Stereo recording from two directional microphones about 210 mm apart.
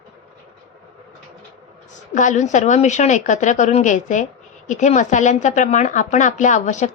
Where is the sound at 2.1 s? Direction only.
35° left (ahead or behind).